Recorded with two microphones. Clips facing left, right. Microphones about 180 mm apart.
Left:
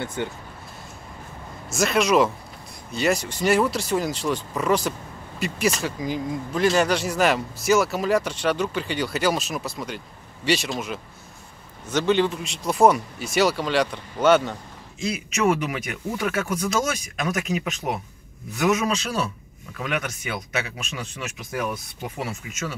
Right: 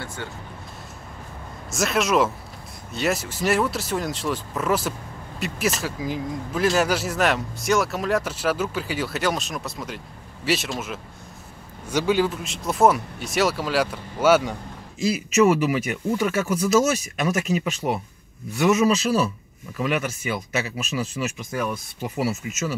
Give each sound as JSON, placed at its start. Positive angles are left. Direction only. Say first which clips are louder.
{"t": 0.0, "sound": "speech", "louder": "left 6 dB", "side_deg": 20}
{"t": 1.7, "sound": "speech", "louder": "left 2 dB", "side_deg": 0}